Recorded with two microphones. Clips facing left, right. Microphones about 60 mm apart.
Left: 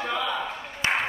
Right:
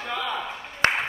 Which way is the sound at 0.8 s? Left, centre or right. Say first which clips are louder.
Right 3 dB; right.